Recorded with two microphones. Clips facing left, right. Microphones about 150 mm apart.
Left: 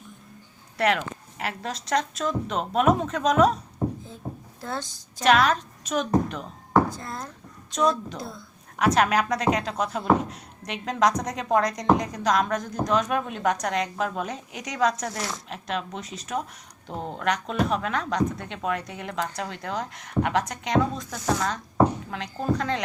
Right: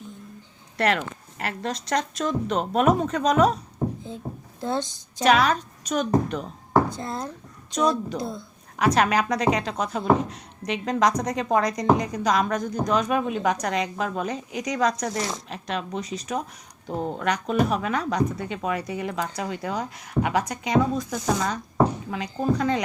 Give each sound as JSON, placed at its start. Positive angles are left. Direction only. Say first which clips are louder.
{"t": 0.8, "sound": "speech", "louder": "even", "side_deg": 0}
{"t": 4.6, "sound": "a woman's voice", "louder": "right 6 dB", "side_deg": -20}
{"t": 5.2, "sound": "speech", "louder": "right 1 dB", "side_deg": 0}
{"t": 6.9, "sound": "a woman's voice", "louder": "right 5 dB", "side_deg": -25}
{"t": 7.7, "sound": "speech", "louder": "right 1 dB", "side_deg": 0}
{"t": 8.2, "sound": "a woman's voice", "louder": "right 6 dB", "side_deg": -20}
{"t": 8.8, "sound": "speech", "louder": "right 1 dB", "side_deg": 0}